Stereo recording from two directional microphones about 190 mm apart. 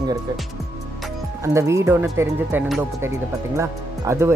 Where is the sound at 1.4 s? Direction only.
15° right (ahead or behind).